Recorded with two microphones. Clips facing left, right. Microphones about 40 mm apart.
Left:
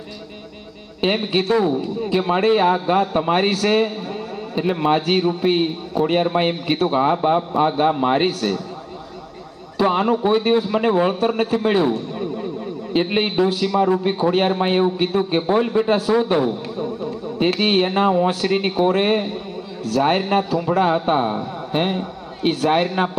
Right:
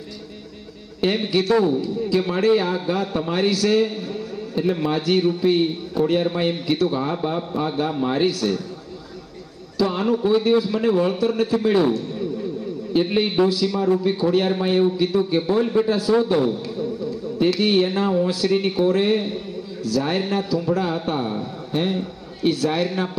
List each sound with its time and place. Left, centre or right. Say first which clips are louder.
1.0 s a man's voice: left 1 dB; left
9.7 s a man's voice: left 3 dB; left
12.1 s a sound: left 1 dB; left
12.9 s a man's voice: even; left